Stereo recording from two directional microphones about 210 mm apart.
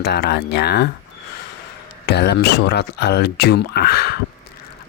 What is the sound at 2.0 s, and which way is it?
Speech, 50° left (ahead or behind).